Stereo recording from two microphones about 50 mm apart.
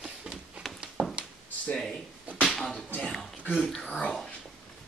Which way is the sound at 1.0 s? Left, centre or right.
Right.